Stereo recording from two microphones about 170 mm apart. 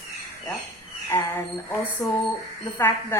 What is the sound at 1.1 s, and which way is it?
Speech, 15° left (ahead or behind).